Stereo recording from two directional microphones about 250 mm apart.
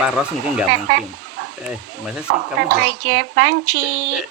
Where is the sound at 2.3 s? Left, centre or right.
Right.